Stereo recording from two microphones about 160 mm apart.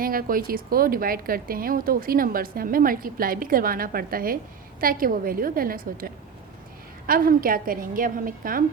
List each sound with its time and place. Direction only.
0.0 s a woman's voice: 60° right (ahead or behind)
7.1 s a woman's voice: 65° right (ahead or behind)